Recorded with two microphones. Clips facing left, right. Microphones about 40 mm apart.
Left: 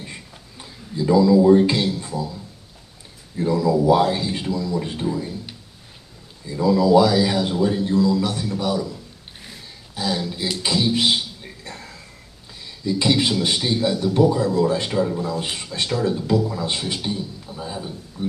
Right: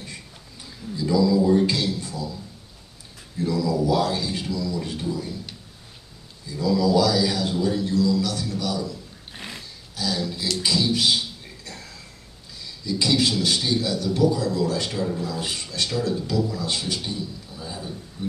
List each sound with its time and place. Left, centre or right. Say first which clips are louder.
0.0 s a sound: left 2 dB; left
3.3 s speech: left 4 dB; left
6.4 s speech: left 4 dB; left
10.3 s a sound: left 1 dB; left
12.6 s speech: left 4 dB; left
15.0 s speech: left 5 dB; centre
15.2 s speech: left 3 dB; left